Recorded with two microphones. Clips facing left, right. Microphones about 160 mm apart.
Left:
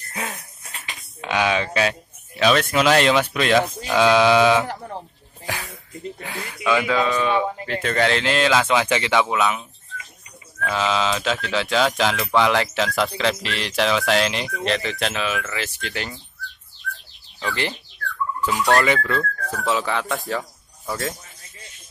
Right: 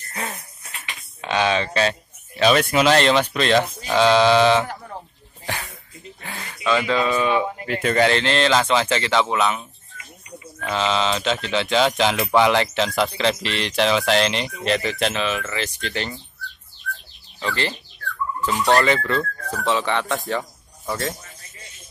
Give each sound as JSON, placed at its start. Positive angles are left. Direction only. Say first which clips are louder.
{"t": 0.1, "sound": "a sound", "louder": "even", "side_deg": 0}
{"t": 1.2, "sound": "speech", "louder": "right 1 dB", "side_deg": 10}
{"t": 4.6, "sound": "sheep", "louder": "left 3 dB", "side_deg": 30}
{"t": 6.2, "sound": "speech", "louder": "even", "side_deg": 5}
{"t": 7.1, "sound": "speech", "louder": "even", "side_deg": -10}
{"t": 8.2, "sound": "speech", "louder": "even", "side_deg": 5}
{"t": 10.7, "sound": "speech", "louder": "even", "side_deg": 5}
{"t": 12.2, "sound": "speech", "louder": "right 3 dB", "side_deg": -15}
{"t": 12.4, "sound": "speech", "louder": "right 1 dB", "side_deg": 0}
{"t": 17.4, "sound": "speech", "louder": "right 1 dB", "side_deg": 10}
{"t": 18.8, "sound": "speech", "louder": "right 1 dB", "side_deg": 5}